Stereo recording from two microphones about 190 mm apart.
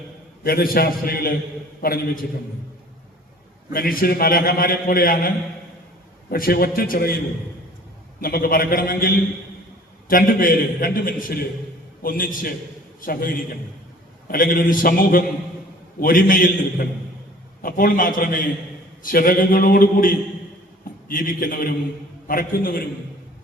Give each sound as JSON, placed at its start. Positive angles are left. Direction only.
{"t": 0.4, "sound": "a man's voice", "side_deg": 50}
{"t": 3.7, "sound": "a man's voice", "side_deg": 50}
{"t": 6.3, "sound": "a man's voice", "side_deg": 50}
{"t": 8.2, "sound": "a man's voice", "side_deg": 50}